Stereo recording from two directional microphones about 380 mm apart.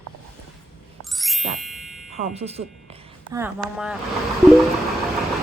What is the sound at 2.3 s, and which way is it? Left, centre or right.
Speech, centre.